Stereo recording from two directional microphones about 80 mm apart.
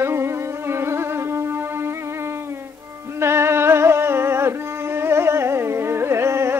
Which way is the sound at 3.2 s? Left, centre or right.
Right.